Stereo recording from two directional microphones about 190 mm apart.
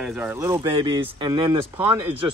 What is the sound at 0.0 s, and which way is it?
Speech, 5° right (ahead or behind).